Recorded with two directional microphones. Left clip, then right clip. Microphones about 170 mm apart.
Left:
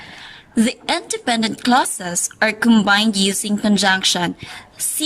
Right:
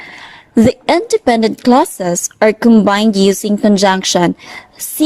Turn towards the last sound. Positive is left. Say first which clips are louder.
# right 9 dB
turn(degrees=-35)  # may be behind; listen again after turning